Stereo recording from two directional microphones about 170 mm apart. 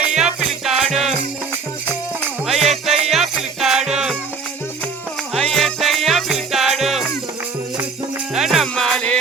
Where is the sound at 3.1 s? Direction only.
Centre (ahead or behind).